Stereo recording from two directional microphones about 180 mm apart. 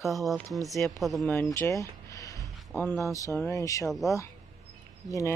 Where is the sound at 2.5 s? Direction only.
Centre (ahead or behind).